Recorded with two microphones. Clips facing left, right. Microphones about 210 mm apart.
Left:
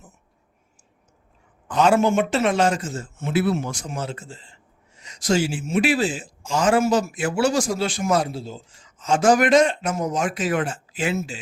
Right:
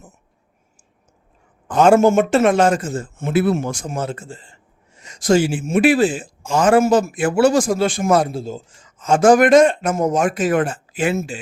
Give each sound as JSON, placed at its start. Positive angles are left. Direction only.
{"t": 1.6, "sound": "speech", "side_deg": -50}